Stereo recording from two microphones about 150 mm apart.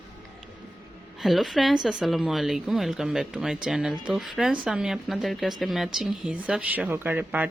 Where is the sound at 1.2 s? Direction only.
Centre (ahead or behind).